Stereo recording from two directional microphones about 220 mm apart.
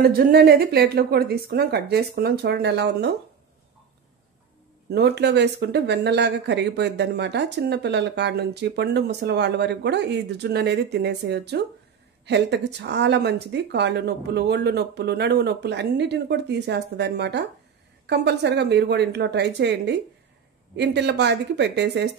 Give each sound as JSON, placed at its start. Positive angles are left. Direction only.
{"t": 0.0, "sound": "speech", "side_deg": -45}
{"t": 4.8, "sound": "speech", "side_deg": -50}